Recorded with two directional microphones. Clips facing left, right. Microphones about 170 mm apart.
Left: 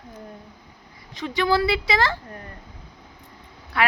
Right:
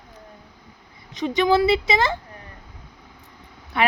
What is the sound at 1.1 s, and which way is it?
A woman's voice, 20° right (ahead or behind).